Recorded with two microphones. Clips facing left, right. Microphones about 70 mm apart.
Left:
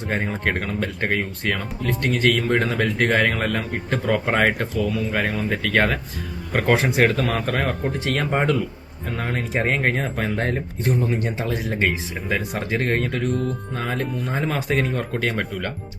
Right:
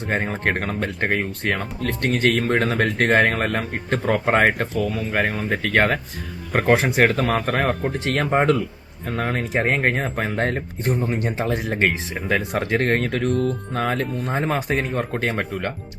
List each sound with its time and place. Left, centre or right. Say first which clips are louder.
0.1 s speech: right 1 dB; right
1.8 s speech: even; right
9.5 s speech: even; right
14.3 s speech: right 1 dB; right